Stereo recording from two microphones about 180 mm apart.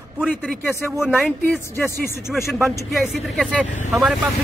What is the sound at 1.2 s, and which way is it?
Speech, 10° left (ahead or behind).